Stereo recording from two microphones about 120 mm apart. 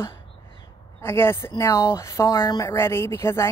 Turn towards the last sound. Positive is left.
turn(degrees=20)  # may be behind; listen again after turning